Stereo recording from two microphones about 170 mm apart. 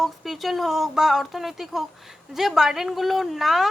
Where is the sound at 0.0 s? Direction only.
Centre (ahead or behind).